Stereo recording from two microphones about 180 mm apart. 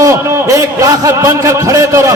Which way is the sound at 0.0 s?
15° right (ahead or behind).